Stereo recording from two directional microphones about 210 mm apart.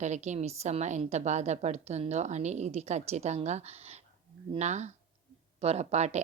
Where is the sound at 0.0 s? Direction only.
35° right (ahead or behind).